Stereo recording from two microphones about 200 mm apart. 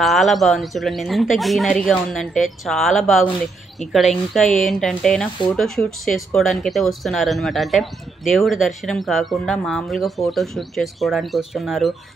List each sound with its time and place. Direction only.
0.0 s speech: centre (ahead or behind)